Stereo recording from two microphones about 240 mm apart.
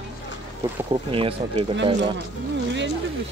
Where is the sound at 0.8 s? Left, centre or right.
Right.